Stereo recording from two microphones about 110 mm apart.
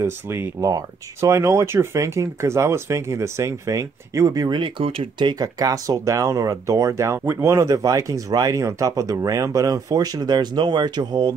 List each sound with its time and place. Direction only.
0.0 s speech: 25° right (ahead or behind); by 5.3 s 55° right (ahead or behind)
5.3 s speech: 35° right (ahead or behind)